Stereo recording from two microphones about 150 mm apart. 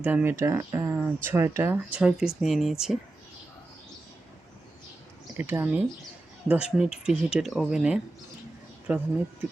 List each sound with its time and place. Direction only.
0.0 s speech: 10° right (ahead or behind)
5.4 s speech: 15° right (ahead or behind)